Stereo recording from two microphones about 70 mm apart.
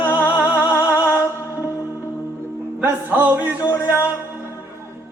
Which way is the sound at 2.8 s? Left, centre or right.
Right.